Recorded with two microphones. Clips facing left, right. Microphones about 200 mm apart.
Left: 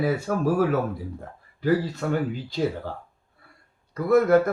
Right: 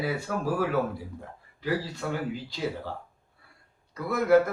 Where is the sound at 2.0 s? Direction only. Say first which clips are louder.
Left 6 dB; 50° left (ahead or behind).